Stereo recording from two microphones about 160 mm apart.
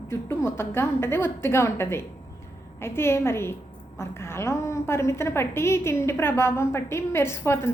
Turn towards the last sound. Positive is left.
turn(degrees=15)  # may be behind; listen again after turning